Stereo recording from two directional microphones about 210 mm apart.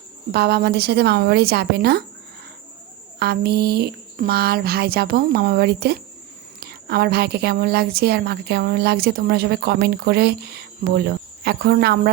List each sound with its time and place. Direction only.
0.3 s a woman's voice: 50° right (ahead or behind)
3.2 s a woman's voice: 50° right (ahead or behind)